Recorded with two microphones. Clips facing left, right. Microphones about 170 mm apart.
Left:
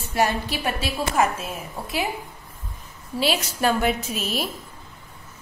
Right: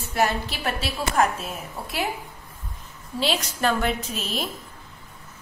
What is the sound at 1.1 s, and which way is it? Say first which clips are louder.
Speech: right 1 dB; 5° left (ahead or behind).